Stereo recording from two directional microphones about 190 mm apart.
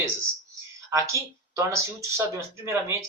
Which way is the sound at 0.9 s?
15° right (ahead or behind).